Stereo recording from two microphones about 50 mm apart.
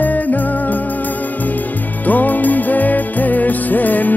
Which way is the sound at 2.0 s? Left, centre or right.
Left.